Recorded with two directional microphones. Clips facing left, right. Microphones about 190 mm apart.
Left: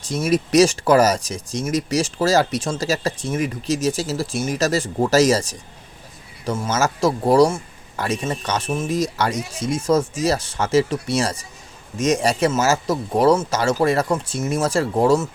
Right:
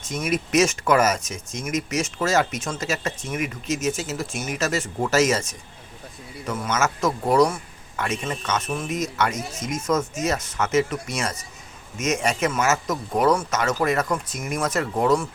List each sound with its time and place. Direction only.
0.3 s speech: 35° left (ahead or behind)